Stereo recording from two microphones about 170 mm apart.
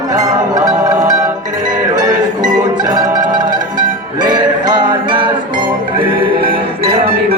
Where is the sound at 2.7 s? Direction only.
25° right (ahead or behind).